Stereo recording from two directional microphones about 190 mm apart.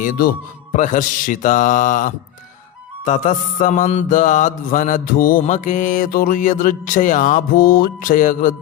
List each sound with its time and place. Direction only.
0.0 s mantra: 45° left (ahead or behind)